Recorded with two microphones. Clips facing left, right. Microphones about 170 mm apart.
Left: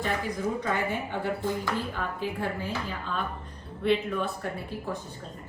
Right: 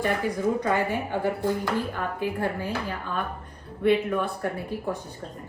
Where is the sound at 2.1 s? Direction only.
55° right (ahead or behind).